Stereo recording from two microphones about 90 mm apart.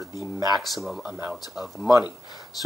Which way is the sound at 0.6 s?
Centre (ahead or behind).